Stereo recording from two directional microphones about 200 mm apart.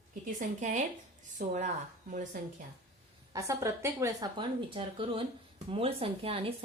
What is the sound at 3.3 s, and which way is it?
A woman's voice, 15° right (ahead or behind).